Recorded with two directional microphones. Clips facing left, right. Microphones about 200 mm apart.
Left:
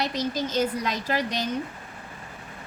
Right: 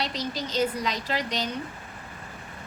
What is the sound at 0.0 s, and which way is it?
A woman's voice, 45° left (ahead or behind).